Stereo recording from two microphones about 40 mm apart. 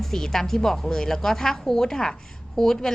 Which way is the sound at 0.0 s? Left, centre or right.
Centre.